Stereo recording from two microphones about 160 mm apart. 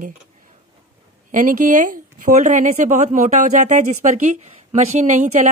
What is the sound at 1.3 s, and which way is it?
Speech, 55° right (ahead or behind).